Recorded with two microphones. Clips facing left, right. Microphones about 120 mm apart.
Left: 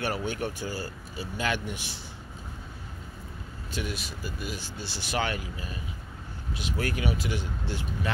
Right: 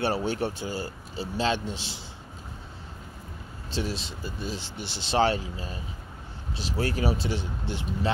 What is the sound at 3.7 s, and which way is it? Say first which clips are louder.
Speech: right 3 dB; 30° right (ahead or behind).